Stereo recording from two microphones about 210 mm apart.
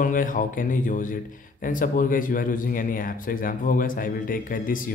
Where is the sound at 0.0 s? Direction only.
40° left (ahead or behind).